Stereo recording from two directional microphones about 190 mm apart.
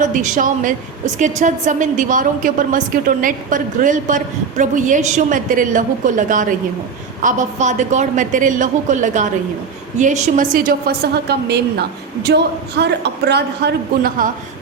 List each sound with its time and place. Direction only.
0.0 s a woman's voice: 45° right (ahead or behind)